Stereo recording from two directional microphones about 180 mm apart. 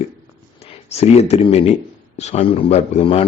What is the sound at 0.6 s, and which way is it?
A man's voice, 35° left (ahead or behind).